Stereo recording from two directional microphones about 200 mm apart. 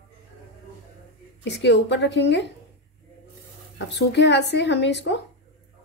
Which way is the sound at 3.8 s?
60° left (ahead or behind).